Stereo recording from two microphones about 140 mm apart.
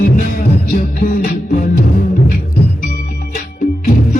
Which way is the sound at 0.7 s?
90° left.